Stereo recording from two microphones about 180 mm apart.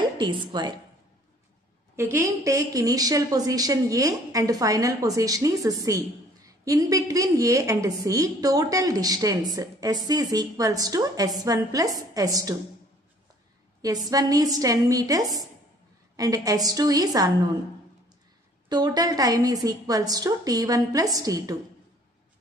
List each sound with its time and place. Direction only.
0.5 s a woman's voice: 25° right (ahead or behind)
2.0 s a woman's voice: 15° right (ahead or behind)
13.7 s a woman's voice: 20° right (ahead or behind)
18.7 s a woman's voice: 20° right (ahead or behind)